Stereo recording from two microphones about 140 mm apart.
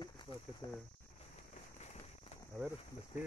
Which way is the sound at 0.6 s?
25° left (ahead or behind).